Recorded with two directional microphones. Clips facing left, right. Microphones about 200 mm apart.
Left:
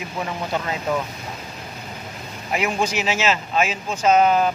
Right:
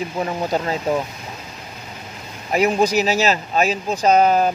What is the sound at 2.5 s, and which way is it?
Speech, 40° right (ahead or behind).